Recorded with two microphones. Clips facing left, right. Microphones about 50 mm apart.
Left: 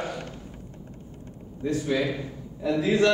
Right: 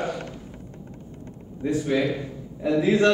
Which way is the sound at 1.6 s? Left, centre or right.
Right.